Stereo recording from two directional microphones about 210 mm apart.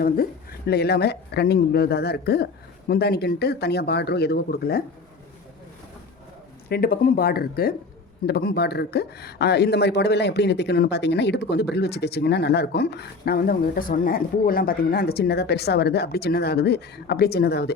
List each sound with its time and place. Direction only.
0.0 s speech: 45° left (ahead or behind)
6.7 s speech: 45° left (ahead or behind)